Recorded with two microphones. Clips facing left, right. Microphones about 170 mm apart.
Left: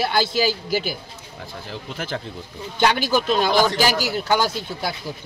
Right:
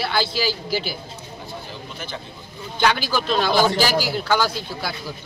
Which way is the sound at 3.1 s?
15° left (ahead or behind).